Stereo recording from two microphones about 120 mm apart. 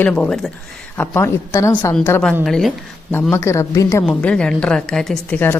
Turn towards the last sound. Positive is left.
turn(degrees=5)  # may be behind; listen again after turning